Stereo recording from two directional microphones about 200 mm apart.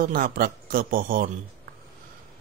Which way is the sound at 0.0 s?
45° right (ahead or behind).